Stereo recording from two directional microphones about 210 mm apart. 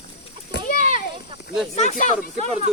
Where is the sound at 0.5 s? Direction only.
40° left (ahead or behind).